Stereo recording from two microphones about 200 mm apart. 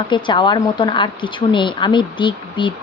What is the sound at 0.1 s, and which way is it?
Speech, 25° left (ahead or behind).